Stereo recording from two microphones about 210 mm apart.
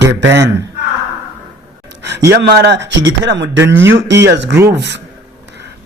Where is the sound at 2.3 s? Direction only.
50° right (ahead or behind).